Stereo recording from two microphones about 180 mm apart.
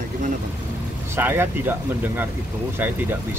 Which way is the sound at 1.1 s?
15° right (ahead or behind).